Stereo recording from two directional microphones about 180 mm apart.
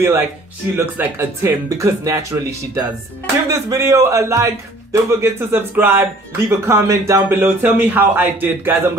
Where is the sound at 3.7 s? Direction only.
15° right (ahead or behind).